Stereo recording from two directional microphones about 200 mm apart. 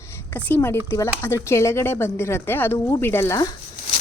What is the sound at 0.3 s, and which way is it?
Speech, 10° left (ahead or behind).